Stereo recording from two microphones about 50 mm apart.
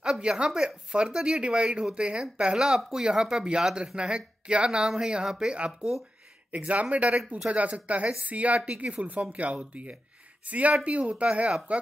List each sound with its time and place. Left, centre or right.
0.0 s speech: centre
5.8 s speech: left
6.5 s speech: right